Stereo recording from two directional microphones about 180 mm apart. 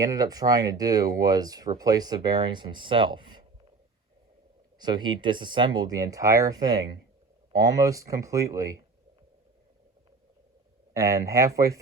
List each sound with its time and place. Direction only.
0.0 s speech: 20° right (ahead or behind)
4.8 s speech: 25° right (ahead or behind)
10.9 s speech: 15° right (ahead or behind)